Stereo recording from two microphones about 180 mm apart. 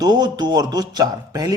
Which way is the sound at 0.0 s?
25° right (ahead or behind).